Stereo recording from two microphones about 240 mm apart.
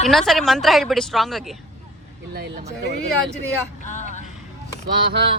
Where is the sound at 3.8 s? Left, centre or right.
Left.